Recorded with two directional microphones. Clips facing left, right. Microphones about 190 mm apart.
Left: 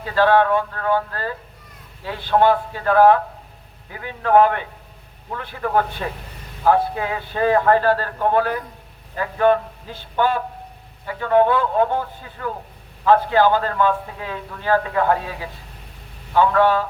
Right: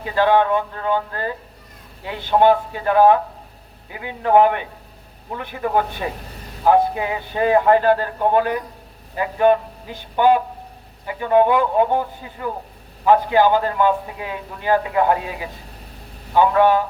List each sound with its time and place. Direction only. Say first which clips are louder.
0.0 s a man's voice: even; 15° right (ahead or behind)